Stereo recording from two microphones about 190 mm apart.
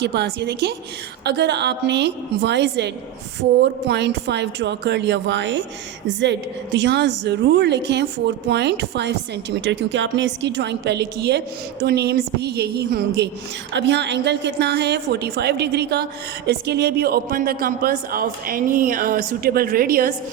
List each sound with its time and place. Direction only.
0.0 s a woman's voice: 60° right (ahead or behind)
6.7 s a woman's voice: 65° right (ahead or behind); by 20.1 s 50° right (ahead or behind)